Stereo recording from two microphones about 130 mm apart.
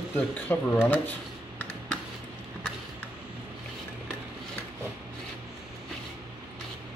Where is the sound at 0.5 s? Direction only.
15° left (ahead or behind).